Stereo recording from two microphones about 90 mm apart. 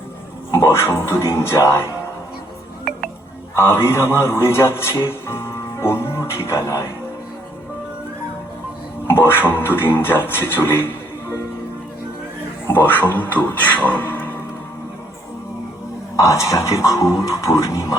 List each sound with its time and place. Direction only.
0.5 s speech: 30° left (ahead or behind)
3.5 s a man's voice: 25° left (ahead or behind)
9.0 s a sound: 25° left (ahead or behind)
9.5 s speech: 25° left (ahead or behind)
12.6 s a man's voice: 20° left (ahead or behind)
16.1 s speech: 35° left (ahead or behind)